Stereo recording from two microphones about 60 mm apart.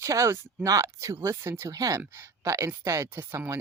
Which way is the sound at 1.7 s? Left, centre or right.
Right.